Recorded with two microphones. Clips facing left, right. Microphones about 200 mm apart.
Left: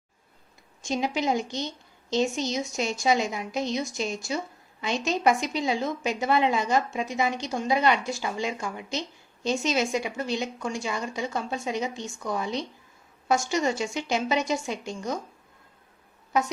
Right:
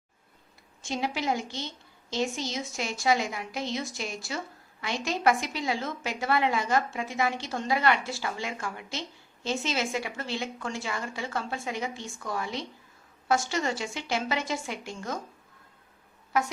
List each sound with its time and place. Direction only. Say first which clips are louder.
0.8 s a woman's voice: left 4 dB; 15° left (ahead or behind)